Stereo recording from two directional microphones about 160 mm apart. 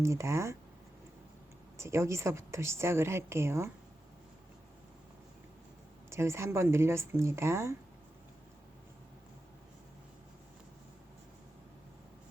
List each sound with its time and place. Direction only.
0.0 s a woman's voice: 20° right (ahead or behind)
1.8 s a woman's voice: 15° right (ahead or behind)
6.1 s a woman's voice: 15° right (ahead or behind)